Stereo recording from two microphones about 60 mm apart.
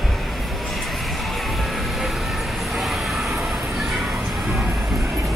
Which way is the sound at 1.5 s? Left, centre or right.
Centre.